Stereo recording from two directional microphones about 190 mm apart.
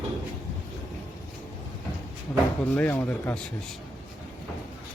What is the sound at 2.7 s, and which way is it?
Speech, 10° left (ahead or behind).